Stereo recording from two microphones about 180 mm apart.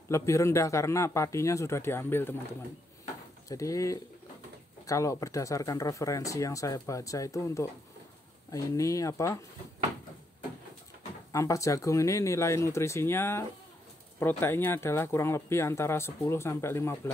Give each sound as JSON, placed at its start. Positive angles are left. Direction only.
{"t": 0.1, "sound": "speech", "side_deg": 15}
{"t": 3.4, "sound": "speech", "side_deg": 20}
{"t": 11.3, "sound": "speech", "side_deg": 15}